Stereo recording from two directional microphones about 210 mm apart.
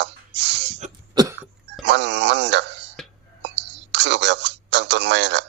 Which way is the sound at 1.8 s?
55° right (ahead or behind).